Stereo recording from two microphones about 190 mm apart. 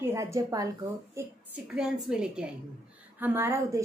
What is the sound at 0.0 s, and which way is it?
Speech, 15° right (ahead or behind).